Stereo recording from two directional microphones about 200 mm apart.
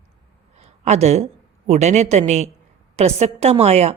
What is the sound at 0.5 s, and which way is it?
A woman's voice, 35° right (ahead or behind).